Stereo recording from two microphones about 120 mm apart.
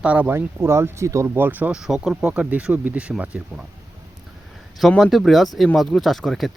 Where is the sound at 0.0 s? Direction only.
10° right (ahead or behind).